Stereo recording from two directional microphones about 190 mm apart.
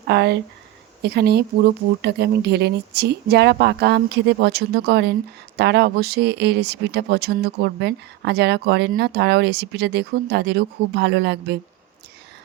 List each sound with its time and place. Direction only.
0.1 s speech: 60° right (ahead or behind)